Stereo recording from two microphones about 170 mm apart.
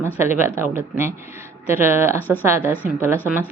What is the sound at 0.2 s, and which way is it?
Speech, 15° right (ahead or behind).